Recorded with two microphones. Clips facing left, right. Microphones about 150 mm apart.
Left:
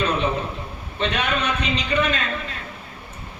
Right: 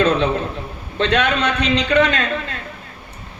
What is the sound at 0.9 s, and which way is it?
A man's voice, 80° right.